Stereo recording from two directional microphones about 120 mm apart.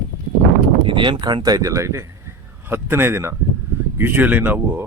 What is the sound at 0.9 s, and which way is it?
Speech, 45° right (ahead or behind).